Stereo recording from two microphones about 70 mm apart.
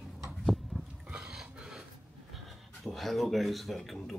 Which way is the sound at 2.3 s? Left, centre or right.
Centre.